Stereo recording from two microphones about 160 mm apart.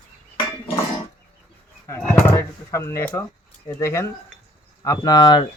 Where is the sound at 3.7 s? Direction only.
15° left (ahead or behind).